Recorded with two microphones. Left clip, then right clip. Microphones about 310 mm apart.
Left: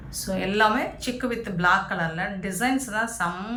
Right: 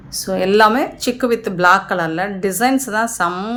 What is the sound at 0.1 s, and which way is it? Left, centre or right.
Speech, centre.